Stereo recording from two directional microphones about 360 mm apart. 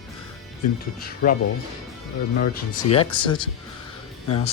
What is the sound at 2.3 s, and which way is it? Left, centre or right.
Speech, left.